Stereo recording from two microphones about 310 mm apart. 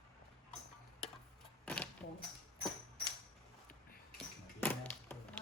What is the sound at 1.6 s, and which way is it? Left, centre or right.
Cash register, centre.